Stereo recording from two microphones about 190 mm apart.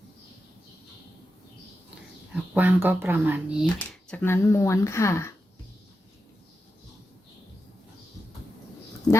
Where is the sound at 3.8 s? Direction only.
10° left (ahead or behind).